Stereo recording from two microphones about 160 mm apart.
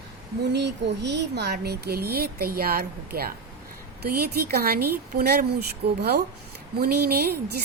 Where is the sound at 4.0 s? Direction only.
80° right.